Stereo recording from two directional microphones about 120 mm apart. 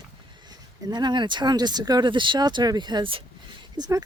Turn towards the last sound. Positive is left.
turn(degrees=-35)  # may be behind; listen again after turning